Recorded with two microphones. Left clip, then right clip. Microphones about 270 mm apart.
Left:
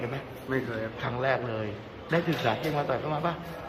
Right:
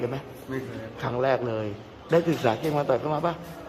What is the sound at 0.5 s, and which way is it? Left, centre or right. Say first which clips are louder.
Speech: left 3 dB; centre.